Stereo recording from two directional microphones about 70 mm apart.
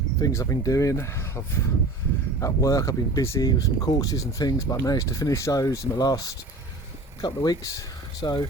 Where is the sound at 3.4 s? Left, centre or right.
Left.